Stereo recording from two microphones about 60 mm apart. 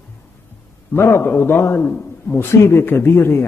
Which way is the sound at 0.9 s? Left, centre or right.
Left.